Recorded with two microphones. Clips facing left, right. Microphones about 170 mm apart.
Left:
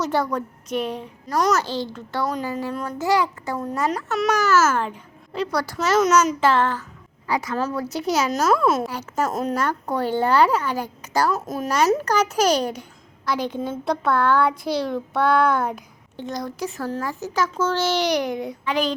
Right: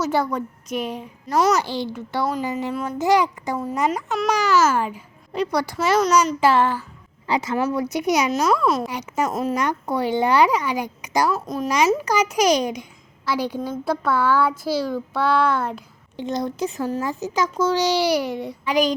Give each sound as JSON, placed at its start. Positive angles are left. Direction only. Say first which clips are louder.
{"t": 0.0, "sound": "a child's voice", "louder": "right 1 dB", "side_deg": -10}
{"t": 3.8, "sound": "a child's voice", "louder": "even", "side_deg": 0}
{"t": 4.3, "sound": "a child's voice", "louder": "right 1 dB", "side_deg": -15}
{"t": 7.3, "sound": "a child's voice", "louder": "right 2 dB", "side_deg": -25}
{"t": 8.3, "sound": "a child's voice", "louder": "even", "side_deg": 5}
{"t": 8.9, "sound": "a child's voice", "louder": "right 1 dB", "side_deg": -15}
{"t": 9.2, "sound": "a child's voice", "louder": "right 1 dB", "side_deg": 0}
{"t": 9.6, "sound": "a child's voice", "louder": "right 1 dB", "side_deg": -15}
{"t": 11.3, "sound": "a child's voice", "louder": "right 1 dB", "side_deg": 0}
{"t": 16.1, "sound": "a child's voice", "louder": "right 4 dB", "side_deg": -20}
{"t": 18.7, "sound": "a child's voice", "louder": "right 4 dB", "side_deg": -10}